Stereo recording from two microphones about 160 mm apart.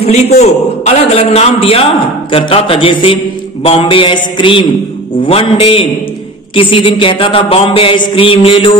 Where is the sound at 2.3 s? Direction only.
35° left (ahead or behind).